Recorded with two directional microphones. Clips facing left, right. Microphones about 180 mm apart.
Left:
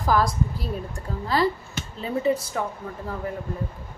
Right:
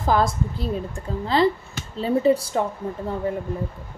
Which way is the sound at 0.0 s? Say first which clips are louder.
Right 1 dB; 25° right (ahead or behind).